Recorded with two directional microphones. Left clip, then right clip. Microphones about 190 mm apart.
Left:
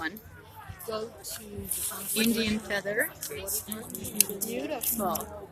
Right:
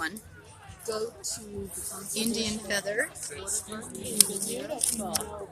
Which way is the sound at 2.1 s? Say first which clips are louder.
Left 3 dB; 5° left (ahead or behind).